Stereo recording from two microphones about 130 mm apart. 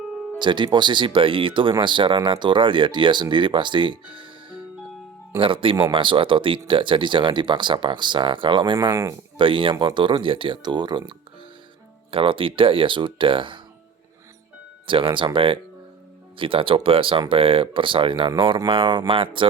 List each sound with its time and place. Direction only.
0.3 s speech: 35° right (ahead or behind)
9.4 s speech: 40° right (ahead or behind)
12.1 s speech: 40° right (ahead or behind)
14.8 s speech: 40° right (ahead or behind)